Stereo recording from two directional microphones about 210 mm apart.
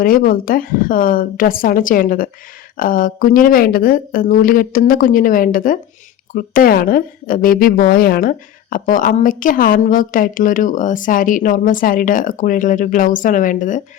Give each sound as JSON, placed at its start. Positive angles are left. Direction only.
{"t": 0.0, "sound": "a woman's voice", "side_deg": 40}